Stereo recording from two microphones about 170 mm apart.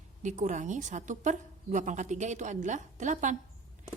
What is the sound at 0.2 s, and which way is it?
A woman's voice, 45° right (ahead or behind).